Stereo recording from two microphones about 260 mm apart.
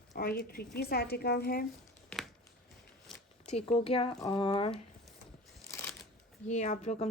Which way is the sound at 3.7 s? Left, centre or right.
Left.